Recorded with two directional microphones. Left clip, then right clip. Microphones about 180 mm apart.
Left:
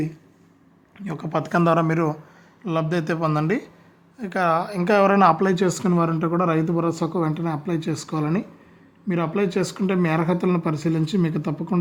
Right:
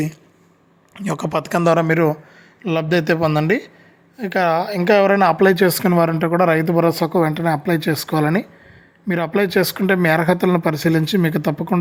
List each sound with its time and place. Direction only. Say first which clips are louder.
0.9 s speech: right 5 dB; 35° right (ahead or behind); by 11.7 s 20° right (ahead or behind)